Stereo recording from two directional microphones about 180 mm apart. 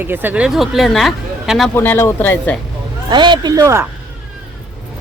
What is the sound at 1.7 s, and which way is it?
Speech, 10° left (ahead or behind).